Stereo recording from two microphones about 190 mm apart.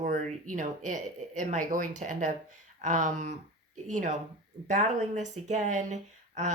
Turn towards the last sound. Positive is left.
turn(degrees=-40)  # may be behind; listen again after turning